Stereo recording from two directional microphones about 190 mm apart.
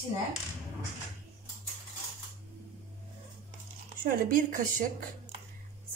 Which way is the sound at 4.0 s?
50° right (ahead or behind).